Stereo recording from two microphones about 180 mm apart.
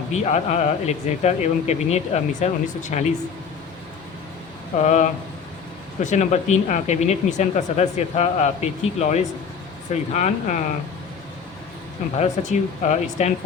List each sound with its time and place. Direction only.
0.1 s speech: 40° left (ahead or behind)
4.8 s speech: 40° left (ahead or behind)
12.1 s speech: 40° left (ahead or behind)